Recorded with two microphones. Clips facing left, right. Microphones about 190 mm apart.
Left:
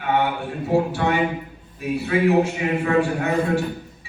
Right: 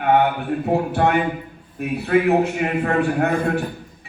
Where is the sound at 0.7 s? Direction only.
55° right (ahead or behind).